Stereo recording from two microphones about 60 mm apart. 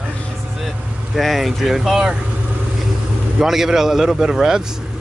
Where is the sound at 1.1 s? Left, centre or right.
Centre.